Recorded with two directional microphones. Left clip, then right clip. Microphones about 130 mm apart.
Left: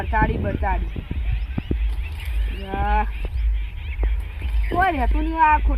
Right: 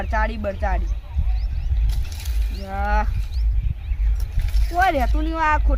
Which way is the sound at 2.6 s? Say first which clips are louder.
Left 1 dB; 20° right (ahead or behind).